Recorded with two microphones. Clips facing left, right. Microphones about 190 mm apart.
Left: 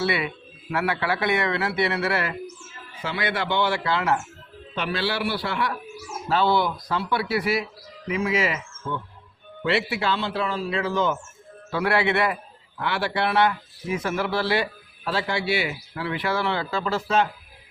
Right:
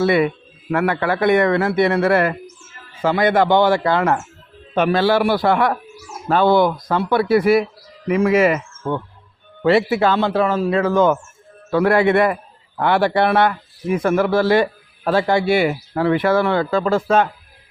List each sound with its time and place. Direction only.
0.0 s a man's voice: 50° right (ahead or behind)
9.6 s a man's voice: 45° right (ahead or behind)